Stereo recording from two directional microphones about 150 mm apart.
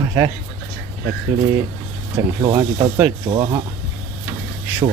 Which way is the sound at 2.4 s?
30° right (ahead or behind).